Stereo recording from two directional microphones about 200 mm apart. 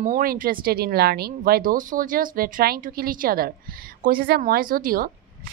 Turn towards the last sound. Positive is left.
turn(degrees=-45)  # may be behind; listen again after turning